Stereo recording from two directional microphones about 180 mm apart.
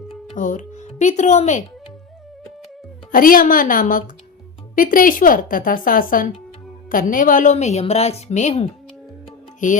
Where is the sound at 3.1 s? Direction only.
50° left (ahead or behind).